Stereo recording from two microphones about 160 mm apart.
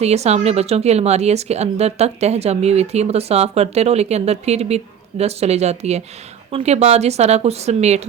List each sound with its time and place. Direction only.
0.0 s speech: 40° right (ahead or behind)